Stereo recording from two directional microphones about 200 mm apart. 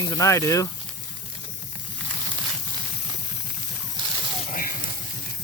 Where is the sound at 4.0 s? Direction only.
25° right (ahead or behind).